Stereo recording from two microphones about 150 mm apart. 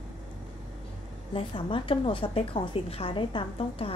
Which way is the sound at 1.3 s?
35° left (ahead or behind).